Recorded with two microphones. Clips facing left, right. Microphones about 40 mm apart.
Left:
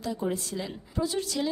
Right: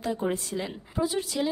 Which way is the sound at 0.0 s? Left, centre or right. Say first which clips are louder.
Right 2 dB; right.